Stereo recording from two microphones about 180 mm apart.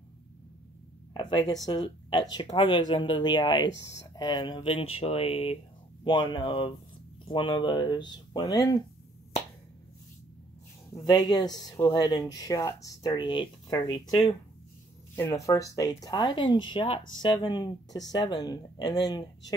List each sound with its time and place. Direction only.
1.1 s speech: 25° left (ahead or behind)
3.6 s speech: 80° left
3.9 s speech: 20° left (ahead or behind)
10.9 s speech: 20° left (ahead or behind)